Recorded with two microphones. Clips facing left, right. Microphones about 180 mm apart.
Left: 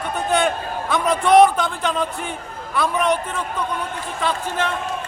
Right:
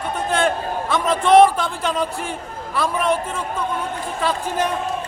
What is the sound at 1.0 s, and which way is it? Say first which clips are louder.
Speech: right 1 dB; 25° right (ahead or behind).